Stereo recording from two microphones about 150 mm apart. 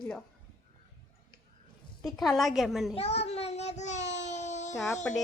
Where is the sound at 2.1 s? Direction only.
Centre (ahead or behind).